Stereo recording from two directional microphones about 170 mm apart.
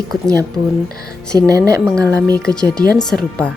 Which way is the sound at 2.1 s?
5° left (ahead or behind).